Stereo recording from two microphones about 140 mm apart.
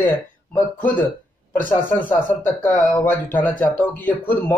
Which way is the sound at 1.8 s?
15° left (ahead or behind).